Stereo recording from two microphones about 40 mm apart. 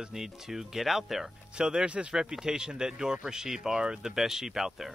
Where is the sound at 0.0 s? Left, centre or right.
Centre.